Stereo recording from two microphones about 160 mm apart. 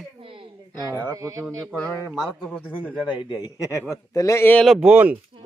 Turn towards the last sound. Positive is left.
turn(degrees=-10)  # may be behind; listen again after turning